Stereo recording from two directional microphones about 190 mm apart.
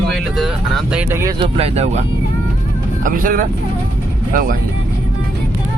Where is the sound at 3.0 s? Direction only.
45° right (ahead or behind).